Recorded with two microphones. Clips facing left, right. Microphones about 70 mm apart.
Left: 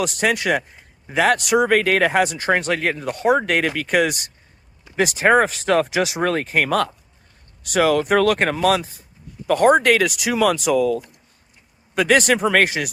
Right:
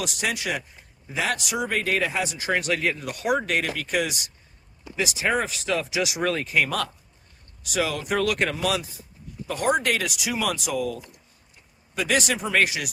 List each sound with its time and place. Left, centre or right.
0.0 s a man's voice: left
3.5 s a man's voice: left
6.0 s a man's voice: left